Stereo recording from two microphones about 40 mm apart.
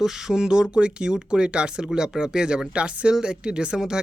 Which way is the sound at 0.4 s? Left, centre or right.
Right.